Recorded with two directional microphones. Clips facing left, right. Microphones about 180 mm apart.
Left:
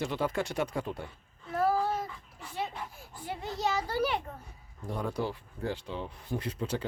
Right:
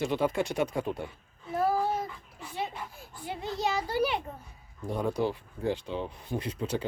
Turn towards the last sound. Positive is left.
turn(degrees=-15)  # may be behind; listen again after turning